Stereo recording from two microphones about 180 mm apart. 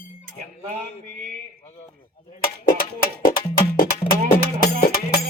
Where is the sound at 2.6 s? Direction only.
55° left (ahead or behind).